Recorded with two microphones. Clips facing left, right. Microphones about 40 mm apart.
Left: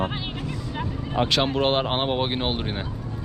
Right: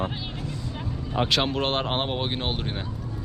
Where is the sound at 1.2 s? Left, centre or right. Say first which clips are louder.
Left 2 dB; centre.